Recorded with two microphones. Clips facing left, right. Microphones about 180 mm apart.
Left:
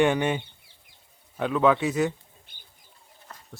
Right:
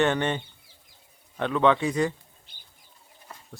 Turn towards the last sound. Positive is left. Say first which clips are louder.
# right 1 dB
turn(degrees=-10)  # may be behind; listen again after turning